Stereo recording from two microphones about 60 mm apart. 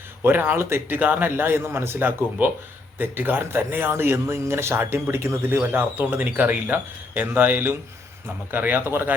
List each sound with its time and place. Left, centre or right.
0.2 s speech: right
0.9 s a man's voice: right